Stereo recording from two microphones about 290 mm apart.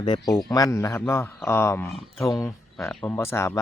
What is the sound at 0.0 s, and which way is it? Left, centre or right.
A man's voice, centre.